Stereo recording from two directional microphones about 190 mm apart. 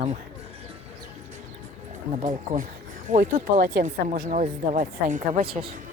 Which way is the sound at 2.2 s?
45° right (ahead or behind).